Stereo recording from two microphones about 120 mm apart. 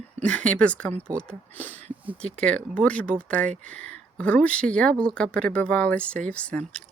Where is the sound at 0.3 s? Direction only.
10° left (ahead or behind).